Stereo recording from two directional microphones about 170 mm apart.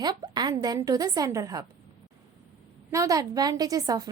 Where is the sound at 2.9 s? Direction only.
20° right (ahead or behind).